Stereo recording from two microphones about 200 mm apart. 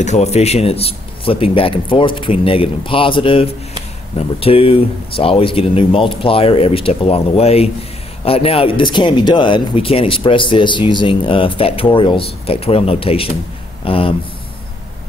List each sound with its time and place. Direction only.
0.0 s speech: 35° left (ahead or behind)